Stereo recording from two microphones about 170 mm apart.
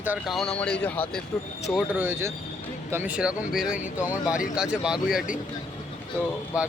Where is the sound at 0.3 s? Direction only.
5° left (ahead or behind).